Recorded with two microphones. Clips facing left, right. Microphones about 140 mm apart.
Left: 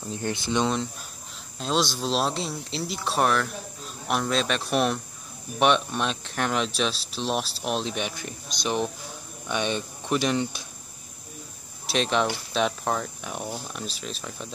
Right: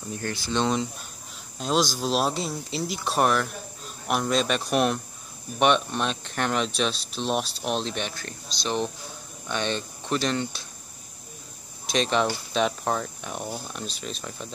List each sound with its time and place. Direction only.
0.1 s speech: 20° left (ahead or behind)
1.6 s speech: centre (ahead or behind)
11.9 s speech: centre (ahead or behind)